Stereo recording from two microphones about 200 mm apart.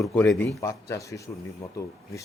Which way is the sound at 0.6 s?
15° left (ahead or behind).